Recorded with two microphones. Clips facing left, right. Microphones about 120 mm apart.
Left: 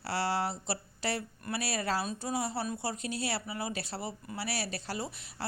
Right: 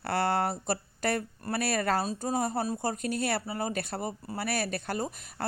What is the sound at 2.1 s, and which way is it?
Speech, 40° right (ahead or behind).